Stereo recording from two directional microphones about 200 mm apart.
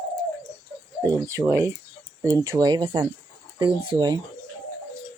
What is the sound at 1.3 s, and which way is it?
Speech, 15° right (ahead or behind).